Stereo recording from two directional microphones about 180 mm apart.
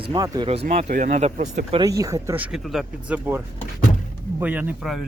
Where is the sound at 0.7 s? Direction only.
45° right (ahead or behind).